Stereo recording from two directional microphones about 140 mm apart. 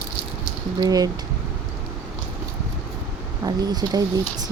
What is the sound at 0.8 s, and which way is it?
Speech, 25° right (ahead or behind).